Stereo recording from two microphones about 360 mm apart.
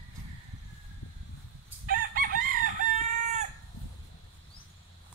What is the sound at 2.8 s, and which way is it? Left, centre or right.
Chicken, left.